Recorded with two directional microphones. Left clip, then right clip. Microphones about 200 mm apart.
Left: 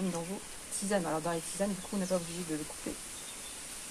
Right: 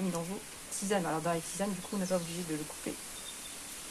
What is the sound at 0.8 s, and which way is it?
Speech, 20° right (ahead or behind).